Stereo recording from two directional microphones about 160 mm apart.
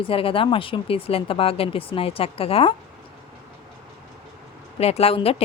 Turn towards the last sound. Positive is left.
turn(degrees=35)  # may be behind; listen again after turning